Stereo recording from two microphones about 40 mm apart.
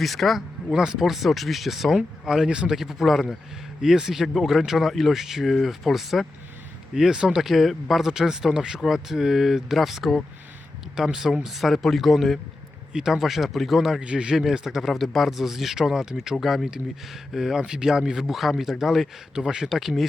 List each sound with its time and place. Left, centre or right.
0.0 s speech: centre
0.7 s speech: centre
1.0 s speech: centre
2.7 s speech: centre
3.8 s speech: centre
6.9 s speech: centre
7.3 s speech: centre
8.0 s speech: centre
12.9 s speech: centre
14.0 s a man's voice: right
14.3 s speech: centre
19.3 s speech: centre
19.6 s speech: centre